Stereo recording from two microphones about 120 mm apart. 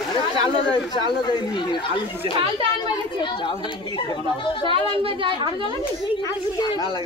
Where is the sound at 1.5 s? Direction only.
40° left (ahead or behind).